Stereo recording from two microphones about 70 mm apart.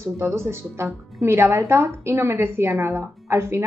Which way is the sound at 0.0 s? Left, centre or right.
Right.